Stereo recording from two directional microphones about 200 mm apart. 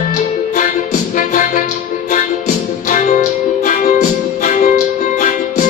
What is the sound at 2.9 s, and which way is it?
Music, 40° left (ahead or behind).